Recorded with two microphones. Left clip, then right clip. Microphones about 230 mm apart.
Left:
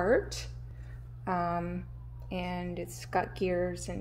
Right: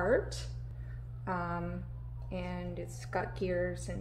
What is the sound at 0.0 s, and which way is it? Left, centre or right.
A woman's voice, left.